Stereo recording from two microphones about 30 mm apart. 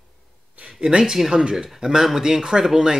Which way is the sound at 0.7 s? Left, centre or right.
Right.